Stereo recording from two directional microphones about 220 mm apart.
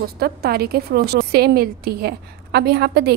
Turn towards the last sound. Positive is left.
turn(degrees=-50)  # may be behind; listen again after turning